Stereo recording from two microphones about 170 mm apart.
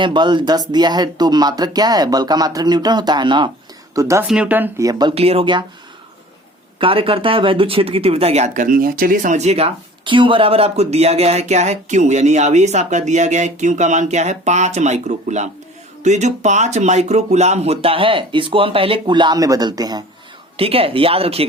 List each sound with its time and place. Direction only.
0.0 s speech: 25° right (ahead or behind)
3.9 s speech: 15° right (ahead or behind)
5.1 s speech: 35° right (ahead or behind)
6.7 s speech: 30° right (ahead or behind)
20.6 s speech: 35° right (ahead or behind)